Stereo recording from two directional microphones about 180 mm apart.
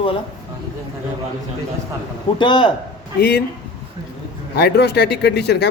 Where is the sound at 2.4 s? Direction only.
25° left (ahead or behind).